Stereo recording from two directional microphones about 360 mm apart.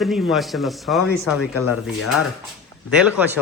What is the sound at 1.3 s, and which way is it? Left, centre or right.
Speech, left.